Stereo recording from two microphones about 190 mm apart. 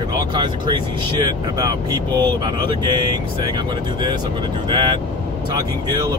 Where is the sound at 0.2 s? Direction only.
25° right (ahead or behind).